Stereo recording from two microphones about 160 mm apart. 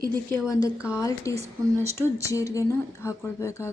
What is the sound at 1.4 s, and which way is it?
Speech, 40° right (ahead or behind).